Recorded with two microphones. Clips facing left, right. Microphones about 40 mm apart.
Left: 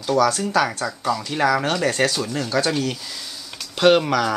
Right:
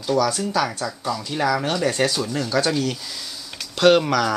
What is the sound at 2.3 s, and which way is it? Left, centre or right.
Speech, left.